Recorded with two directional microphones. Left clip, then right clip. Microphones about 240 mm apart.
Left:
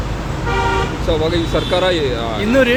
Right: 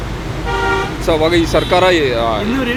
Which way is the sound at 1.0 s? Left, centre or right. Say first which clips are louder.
Right 7 dB; right.